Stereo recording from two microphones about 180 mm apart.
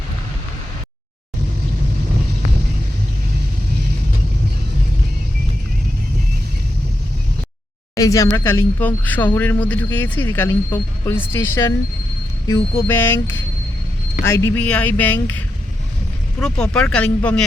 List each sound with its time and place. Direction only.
7.9 s speech: 20° left (ahead or behind)
14.3 s speech: 15° left (ahead or behind)